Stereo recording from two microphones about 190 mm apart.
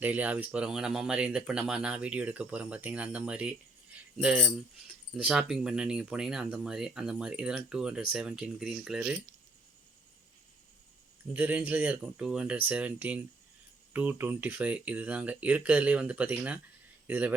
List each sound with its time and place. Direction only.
0.0 s speech: 10° right (ahead or behind)
11.3 s speech: 10° right (ahead or behind)